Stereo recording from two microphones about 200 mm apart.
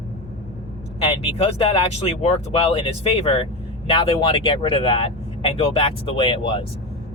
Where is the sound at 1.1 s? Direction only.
30° left (ahead or behind).